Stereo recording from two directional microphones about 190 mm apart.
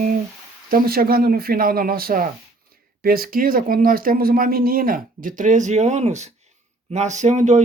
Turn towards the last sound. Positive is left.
turn(degrees=-40)  # may be behind; listen again after turning